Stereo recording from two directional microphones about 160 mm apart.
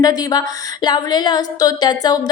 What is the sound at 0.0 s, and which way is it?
A woman's voice, 25° left (ahead or behind).